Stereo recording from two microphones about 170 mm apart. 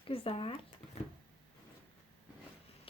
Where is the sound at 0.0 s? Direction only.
35° left (ahead or behind).